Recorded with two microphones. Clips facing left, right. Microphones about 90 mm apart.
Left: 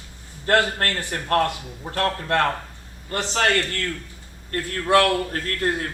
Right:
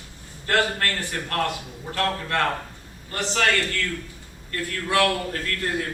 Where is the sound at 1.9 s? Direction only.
45° left (ahead or behind).